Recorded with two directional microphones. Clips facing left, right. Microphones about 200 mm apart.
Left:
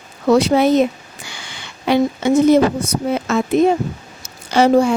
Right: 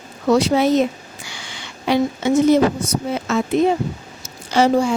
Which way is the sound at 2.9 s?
55° left (ahead or behind).